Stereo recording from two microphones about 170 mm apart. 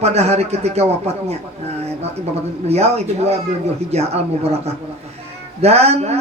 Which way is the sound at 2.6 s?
40° right (ahead or behind).